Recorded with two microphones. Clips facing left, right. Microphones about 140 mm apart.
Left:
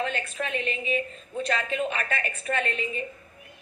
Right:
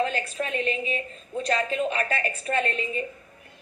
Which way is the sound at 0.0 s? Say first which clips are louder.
Right 3 dB; 35° right (ahead or behind).